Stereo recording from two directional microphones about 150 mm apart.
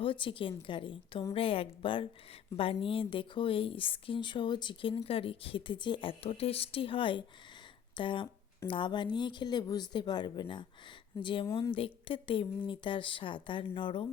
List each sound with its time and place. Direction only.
0.0 s speech: 35° left (ahead or behind)